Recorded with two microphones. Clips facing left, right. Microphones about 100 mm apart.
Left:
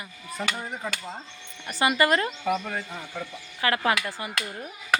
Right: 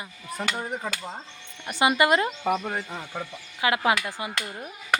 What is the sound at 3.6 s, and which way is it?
Speech, 15° right (ahead or behind).